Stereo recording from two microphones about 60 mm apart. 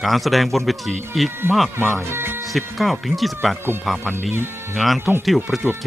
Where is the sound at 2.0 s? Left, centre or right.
Right.